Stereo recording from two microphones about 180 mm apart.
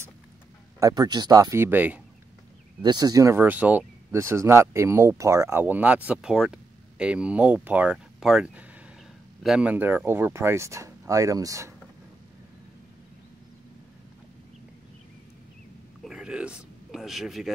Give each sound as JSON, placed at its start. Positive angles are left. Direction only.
{"t": 0.7, "sound": "speech", "side_deg": -20}
{"t": 2.8, "sound": "speech", "side_deg": -20}
{"t": 16.0, "sound": "a sound", "side_deg": -5}